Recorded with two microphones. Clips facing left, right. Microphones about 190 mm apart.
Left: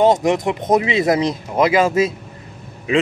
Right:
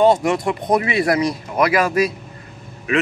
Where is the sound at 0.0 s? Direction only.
20° left (ahead or behind).